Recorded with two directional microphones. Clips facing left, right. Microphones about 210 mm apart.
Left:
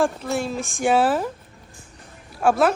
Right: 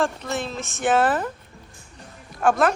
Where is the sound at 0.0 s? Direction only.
10° left (ahead or behind).